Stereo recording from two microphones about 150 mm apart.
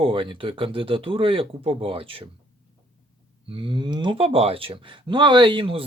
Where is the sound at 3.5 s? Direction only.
35° right (ahead or behind).